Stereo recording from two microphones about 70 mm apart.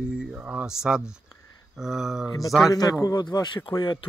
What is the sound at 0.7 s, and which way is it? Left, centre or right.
Speech, centre.